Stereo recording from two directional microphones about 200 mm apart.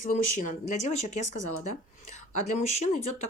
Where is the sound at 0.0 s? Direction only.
40° left (ahead or behind).